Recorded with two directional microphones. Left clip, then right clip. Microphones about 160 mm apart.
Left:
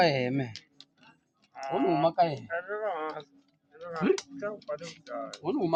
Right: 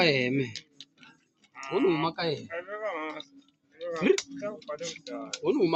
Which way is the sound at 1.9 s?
25° left (ahead or behind).